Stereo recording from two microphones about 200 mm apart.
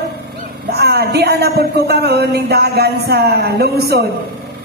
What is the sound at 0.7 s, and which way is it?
Speech, 55° right (ahead or behind).